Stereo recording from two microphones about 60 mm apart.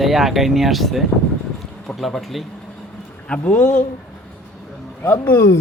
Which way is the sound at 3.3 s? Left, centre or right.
Left.